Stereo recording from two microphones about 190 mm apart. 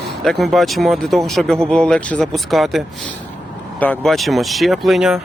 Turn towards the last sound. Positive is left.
turn(degrees=0)  # may be behind; listen again after turning